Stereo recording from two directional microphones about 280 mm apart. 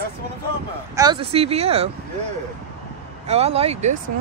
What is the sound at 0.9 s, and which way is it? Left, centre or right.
Speech, centre.